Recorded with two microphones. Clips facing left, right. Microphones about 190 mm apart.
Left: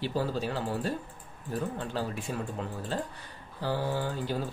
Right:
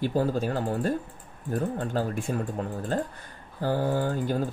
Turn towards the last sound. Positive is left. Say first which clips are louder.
# right 5 dB
turn(degrees=-50)  # may be behind; listen again after turning